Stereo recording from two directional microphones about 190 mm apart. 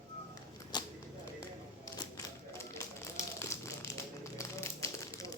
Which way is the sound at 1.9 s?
15° left (ahead or behind).